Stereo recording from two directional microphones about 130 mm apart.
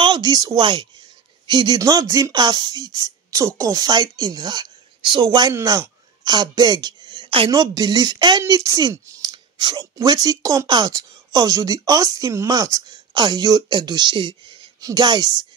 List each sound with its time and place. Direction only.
0.0 s speech: 30° right (ahead or behind)
5.5 s speech: 20° right (ahead or behind); by 7.5 s 40° right (ahead or behind)
7.5 s speech: 30° right (ahead or behind)